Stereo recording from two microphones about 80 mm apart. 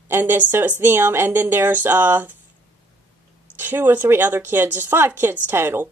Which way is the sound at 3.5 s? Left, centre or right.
Right.